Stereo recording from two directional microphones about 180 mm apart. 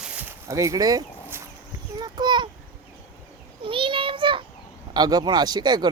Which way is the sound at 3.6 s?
30° right (ahead or behind).